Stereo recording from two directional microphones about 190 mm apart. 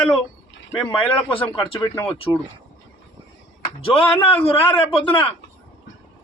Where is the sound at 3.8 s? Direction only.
30° left (ahead or behind).